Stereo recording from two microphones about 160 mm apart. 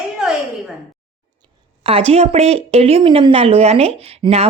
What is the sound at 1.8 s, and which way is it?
Speech, 40° right (ahead or behind).